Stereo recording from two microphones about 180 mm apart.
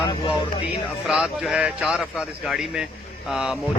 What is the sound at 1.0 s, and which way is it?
Speech, centre (ahead or behind).